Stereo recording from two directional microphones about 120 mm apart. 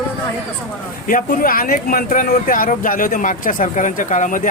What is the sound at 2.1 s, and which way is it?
Speech, 90° left.